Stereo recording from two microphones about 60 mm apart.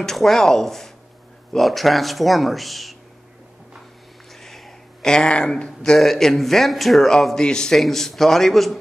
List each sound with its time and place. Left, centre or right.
0.0 s a man's voice: centre
4.3 s a sound: centre
5.1 s a man's voice: centre